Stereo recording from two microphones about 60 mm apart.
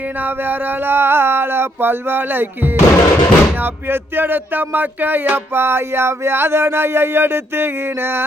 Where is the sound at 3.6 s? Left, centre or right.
Right.